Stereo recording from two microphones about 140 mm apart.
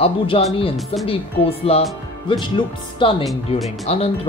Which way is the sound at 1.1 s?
45° left (ahead or behind).